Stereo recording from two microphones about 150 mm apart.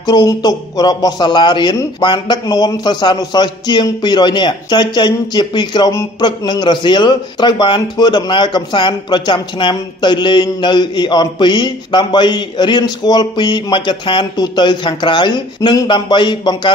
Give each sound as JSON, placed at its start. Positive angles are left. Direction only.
{"t": 0.0, "sound": "a man's voice", "side_deg": 25}